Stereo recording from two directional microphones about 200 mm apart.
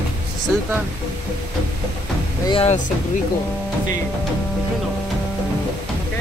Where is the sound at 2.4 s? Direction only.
25° left (ahead or behind).